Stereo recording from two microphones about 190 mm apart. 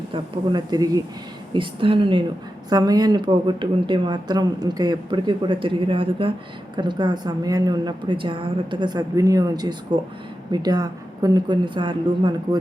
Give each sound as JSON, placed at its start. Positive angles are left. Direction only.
{"t": 0.1, "sound": "speech", "side_deg": -20}